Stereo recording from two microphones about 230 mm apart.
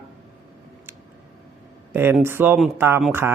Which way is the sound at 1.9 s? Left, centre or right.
Centre.